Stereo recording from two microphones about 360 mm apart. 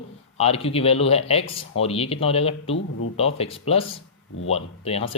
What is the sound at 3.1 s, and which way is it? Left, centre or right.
Speech, centre.